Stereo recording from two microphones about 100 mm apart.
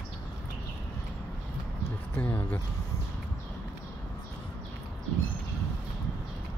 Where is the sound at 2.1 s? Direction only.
20° left (ahead or behind).